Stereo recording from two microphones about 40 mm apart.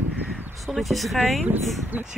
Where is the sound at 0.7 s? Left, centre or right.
Centre.